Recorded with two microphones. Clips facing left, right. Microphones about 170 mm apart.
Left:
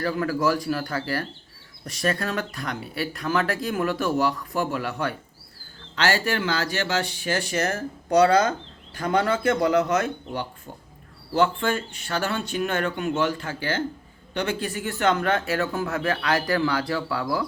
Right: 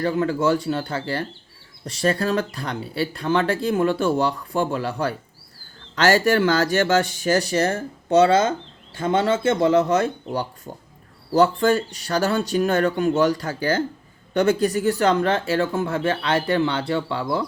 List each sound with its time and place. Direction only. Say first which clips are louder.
0.0 s speech: right 3 dB; 25° right (ahead or behind)
6.0 s speech: right 7 dB; 45° right (ahead or behind); by 17.4 s 25° right (ahead or behind)